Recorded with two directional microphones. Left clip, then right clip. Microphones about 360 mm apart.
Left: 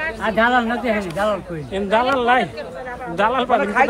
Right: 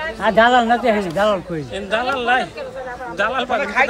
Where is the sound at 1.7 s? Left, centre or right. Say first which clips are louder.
Left 3 dB; centre.